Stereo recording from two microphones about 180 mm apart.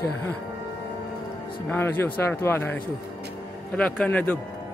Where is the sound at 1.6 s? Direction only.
10° left (ahead or behind).